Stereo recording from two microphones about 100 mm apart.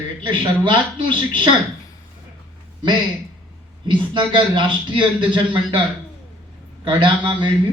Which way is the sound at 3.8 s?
50° right (ahead or behind).